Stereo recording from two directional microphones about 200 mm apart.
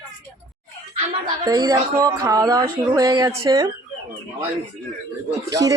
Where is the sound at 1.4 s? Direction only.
20° right (ahead or behind).